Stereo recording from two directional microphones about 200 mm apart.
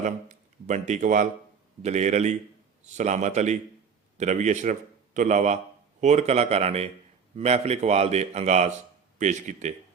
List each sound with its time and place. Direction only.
0.0 s a man's voice: 40° right (ahead or behind)